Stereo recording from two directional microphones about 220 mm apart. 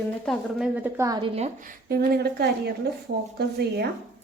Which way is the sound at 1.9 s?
45° right (ahead or behind).